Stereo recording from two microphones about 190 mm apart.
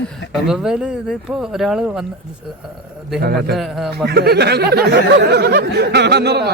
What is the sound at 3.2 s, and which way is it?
Speech, 55° right (ahead or behind).